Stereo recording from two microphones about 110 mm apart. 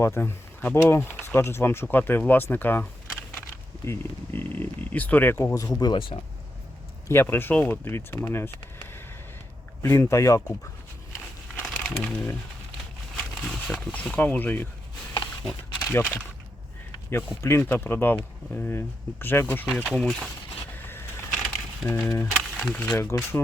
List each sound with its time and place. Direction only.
0.0 s speech: 20° left (ahead or behind)
5.8 s speech: 45° left (ahead or behind)
7.1 s speech: 20° left (ahead or behind)
11.7 s speech: 15° left (ahead or behind)
15.9 s speech: 20° left (ahead or behind); by 20.3 s 5° left (ahead or behind)
20.7 s a sound: 20° left (ahead or behind)
21.2 s a sound: 5° left (ahead or behind)
21.8 s speech: 25° left (ahead or behind)
22.3 s music: centre (ahead or behind)
22.9 s speech: 25° left (ahead or behind)